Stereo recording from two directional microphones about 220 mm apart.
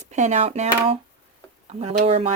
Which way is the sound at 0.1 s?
30° right (ahead or behind).